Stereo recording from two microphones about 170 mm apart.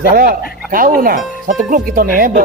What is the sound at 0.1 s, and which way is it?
Speech, 60° right (ahead or behind).